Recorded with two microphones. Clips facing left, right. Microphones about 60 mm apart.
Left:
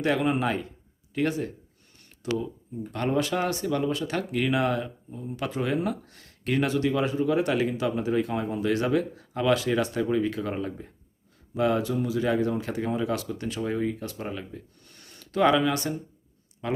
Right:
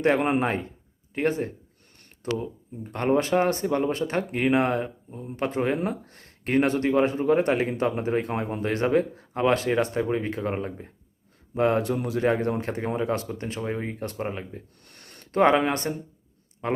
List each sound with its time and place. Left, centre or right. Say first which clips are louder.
0.2 s speech: right 2 dB; right
11.5 s speech: right 2 dB; right
14.8 s a sound: right 2 dB; right
16.6 s a man's voice: right 4 dB; right